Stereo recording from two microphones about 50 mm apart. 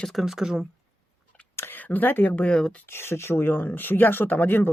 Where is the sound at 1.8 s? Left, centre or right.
Left.